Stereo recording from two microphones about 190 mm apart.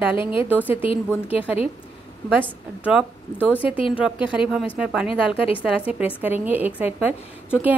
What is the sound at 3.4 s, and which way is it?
Speech, 10° left (ahead or behind).